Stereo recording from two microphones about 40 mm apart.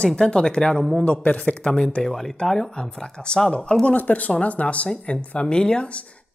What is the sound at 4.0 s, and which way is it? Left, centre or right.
Speech, left.